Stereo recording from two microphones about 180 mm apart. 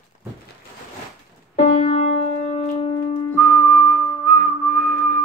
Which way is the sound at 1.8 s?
35° left (ahead or behind).